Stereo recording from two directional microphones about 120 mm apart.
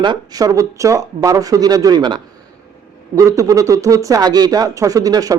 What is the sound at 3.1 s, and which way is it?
Speech, 25° right (ahead or behind).